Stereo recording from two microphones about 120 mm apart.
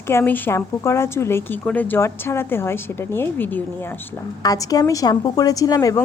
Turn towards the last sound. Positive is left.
turn(degrees=30)  # may be behind; listen again after turning